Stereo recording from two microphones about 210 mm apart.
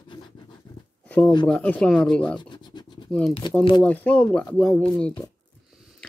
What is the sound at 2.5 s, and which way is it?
Scratch, 20° left (ahead or behind).